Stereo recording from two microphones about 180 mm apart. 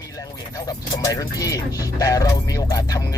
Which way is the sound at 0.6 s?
20° left (ahead or behind).